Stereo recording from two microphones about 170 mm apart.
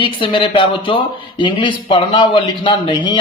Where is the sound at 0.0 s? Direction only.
30° left (ahead or behind).